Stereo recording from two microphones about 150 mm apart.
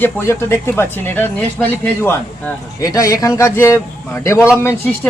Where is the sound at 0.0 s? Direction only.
15° left (ahead or behind).